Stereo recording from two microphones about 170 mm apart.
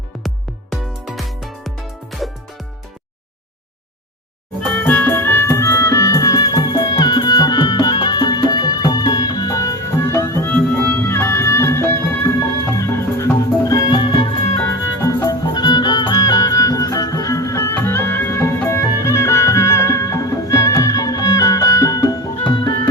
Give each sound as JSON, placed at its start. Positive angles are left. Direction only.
{"t": 0.7, "sound": "music", "side_deg": 0}
{"t": 4.6, "sound": "music", "side_deg": 10}